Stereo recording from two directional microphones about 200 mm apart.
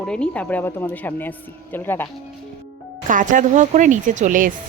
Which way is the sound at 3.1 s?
40° right (ahead or behind).